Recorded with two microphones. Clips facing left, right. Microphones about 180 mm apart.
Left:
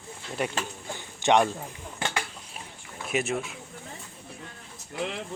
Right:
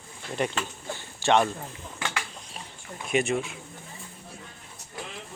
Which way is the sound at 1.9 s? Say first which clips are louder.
Left 2 dB; 30° left (ahead or behind).